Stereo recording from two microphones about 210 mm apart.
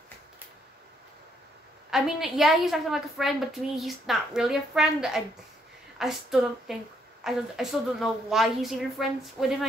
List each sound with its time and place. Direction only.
1.9 s a woman's voice: centre (ahead or behind)